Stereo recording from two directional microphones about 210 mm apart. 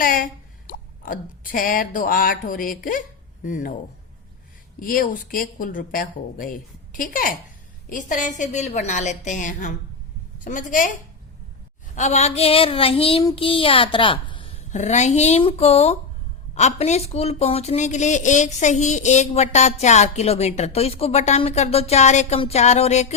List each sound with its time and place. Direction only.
0.0 s a woman's voice: 40° left (ahead or behind)
4.8 s a woman's voice: 40° left (ahead or behind)
11.9 s child singing: 35° left (ahead or behind)
16.6 s a woman's voice: 35° left (ahead or behind)